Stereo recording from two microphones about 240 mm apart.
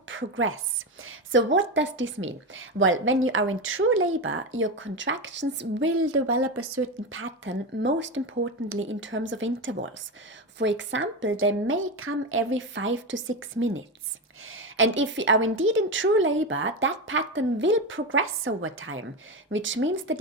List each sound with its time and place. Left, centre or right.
0.1 s a woman's voice: right